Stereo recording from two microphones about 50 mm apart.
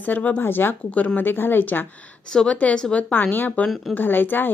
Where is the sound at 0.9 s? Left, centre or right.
Left.